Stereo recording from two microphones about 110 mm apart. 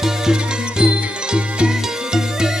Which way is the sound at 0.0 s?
5° right (ahead or behind).